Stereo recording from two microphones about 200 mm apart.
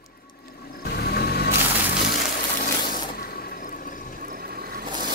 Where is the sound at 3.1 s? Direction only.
50° left (ahead or behind).